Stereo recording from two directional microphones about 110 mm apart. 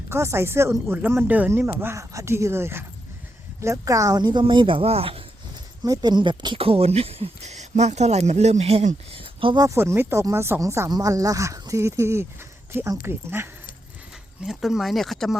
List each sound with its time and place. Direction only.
0.1 s speech: 25° right (ahead or behind); by 5.2 s 60° right (ahead or behind)
5.8 s speech: 40° right (ahead or behind); by 9.2 s 80° right
9.2 s a sound: 50° right (ahead or behind)
9.6 s speech: 25° right (ahead or behind)
10.8 s speech: 35° right (ahead or behind)
14.4 s speech: centre (ahead or behind)